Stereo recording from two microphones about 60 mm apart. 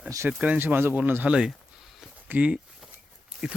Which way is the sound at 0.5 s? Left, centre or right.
Right.